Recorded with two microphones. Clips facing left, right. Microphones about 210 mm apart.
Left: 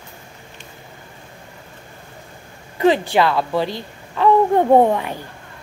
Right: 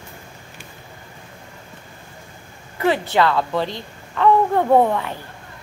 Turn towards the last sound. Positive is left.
turn(degrees=15)  # may be behind; listen again after turning